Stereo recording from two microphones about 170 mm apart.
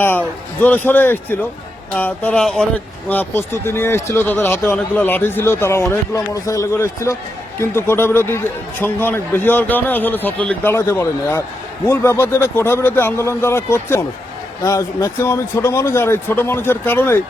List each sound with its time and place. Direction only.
0.6 s a man's voice: 10° left (ahead or behind)